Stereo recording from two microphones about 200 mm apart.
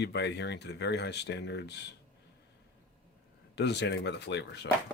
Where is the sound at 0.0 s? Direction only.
60° left (ahead or behind).